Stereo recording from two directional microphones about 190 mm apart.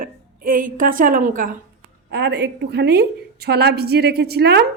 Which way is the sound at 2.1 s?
60° right (ahead or behind).